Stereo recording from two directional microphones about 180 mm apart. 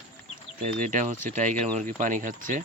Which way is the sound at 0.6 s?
45° right (ahead or behind).